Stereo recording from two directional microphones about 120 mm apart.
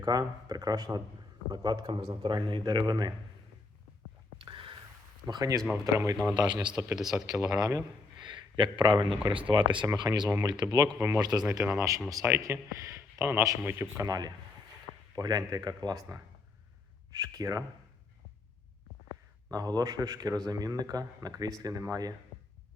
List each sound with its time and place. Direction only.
0.0 s a man's voice: 35° right (ahead or behind)
4.4 s a sound: 45° right (ahead or behind)
5.2 s speech: 30° right (ahead or behind)
6.3 s a man's voice: 35° right (ahead or behind)
6.9 s speech: 5° right (ahead or behind)
7.6 s speech: 25° right (ahead or behind)
8.2 s a sound: 40° right (ahead or behind)
9.2 s a man's voice: 45° right (ahead or behind)
19.5 s a man's voice: 35° right (ahead or behind)